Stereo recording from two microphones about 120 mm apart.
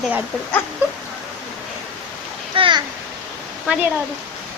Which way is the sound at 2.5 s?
45° right (ahead or behind).